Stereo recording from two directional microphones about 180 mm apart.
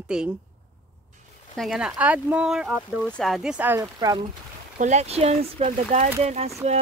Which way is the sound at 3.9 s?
25° right (ahead or behind).